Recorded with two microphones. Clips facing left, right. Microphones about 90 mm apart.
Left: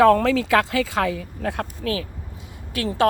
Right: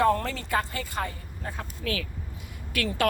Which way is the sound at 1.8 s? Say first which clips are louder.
Left 2 dB; 30° left (ahead or behind).